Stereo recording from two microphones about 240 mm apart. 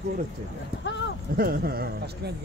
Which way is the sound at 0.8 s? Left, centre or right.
Left.